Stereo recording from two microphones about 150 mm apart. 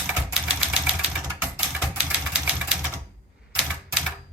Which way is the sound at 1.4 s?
5° right (ahead or behind).